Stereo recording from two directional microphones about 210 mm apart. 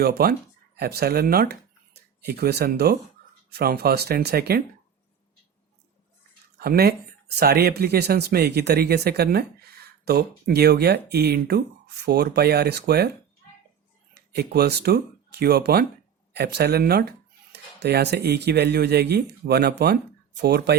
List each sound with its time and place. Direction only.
0.0 s speech: 50° right (ahead or behind)
6.6 s speech: 50° right (ahead or behind)
14.1 s speech: 50° right (ahead or behind)